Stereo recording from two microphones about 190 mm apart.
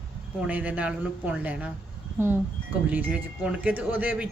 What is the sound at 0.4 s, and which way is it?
Speech, 10° right (ahead or behind).